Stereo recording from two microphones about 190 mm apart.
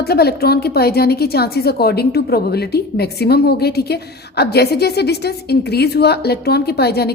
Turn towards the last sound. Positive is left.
turn(degrees=55)  # may be behind; listen again after turning